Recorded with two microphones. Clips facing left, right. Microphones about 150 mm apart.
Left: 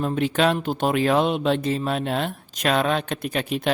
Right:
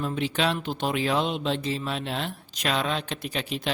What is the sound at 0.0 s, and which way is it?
Speech, 50° left (ahead or behind).